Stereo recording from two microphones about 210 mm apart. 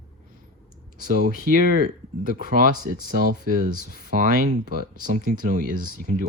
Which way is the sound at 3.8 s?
45° left (ahead or behind).